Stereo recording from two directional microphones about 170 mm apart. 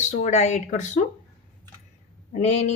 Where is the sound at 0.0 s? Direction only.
45° left (ahead or behind).